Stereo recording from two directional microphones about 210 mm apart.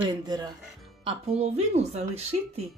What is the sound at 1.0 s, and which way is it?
Speech, 30° right (ahead or behind).